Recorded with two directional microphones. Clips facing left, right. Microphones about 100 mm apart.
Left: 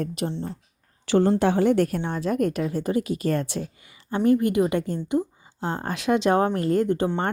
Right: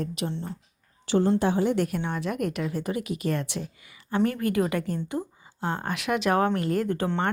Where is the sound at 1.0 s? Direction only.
60° left (ahead or behind); by 2.0 s 45° left (ahead or behind).